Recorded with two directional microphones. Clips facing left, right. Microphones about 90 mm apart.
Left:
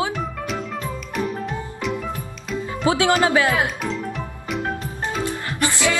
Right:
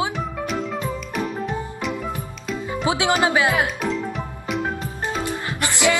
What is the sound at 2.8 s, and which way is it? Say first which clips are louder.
Speech: left 2 dB; 20° right (ahead or behind).